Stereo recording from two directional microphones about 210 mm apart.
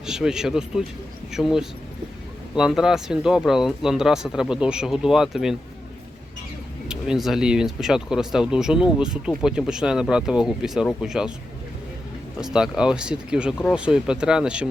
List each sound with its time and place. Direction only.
0.0 s speech: 5° right (ahead or behind)
6.8 s speech: 5° right (ahead or behind)
12.4 s speech: centre (ahead or behind)